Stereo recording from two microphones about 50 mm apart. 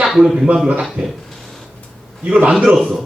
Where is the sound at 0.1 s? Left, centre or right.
Centre.